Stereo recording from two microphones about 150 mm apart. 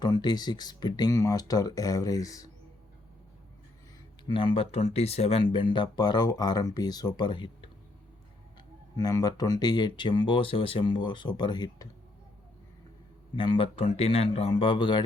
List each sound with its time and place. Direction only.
0.0 s speech: 30° left (ahead or behind)
4.3 s speech: 35° left (ahead or behind)
9.0 s speech: 25° left (ahead or behind)
13.3 s speech: 35° left (ahead or behind)